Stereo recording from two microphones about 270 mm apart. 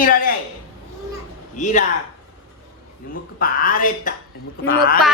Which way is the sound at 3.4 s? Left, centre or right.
Left.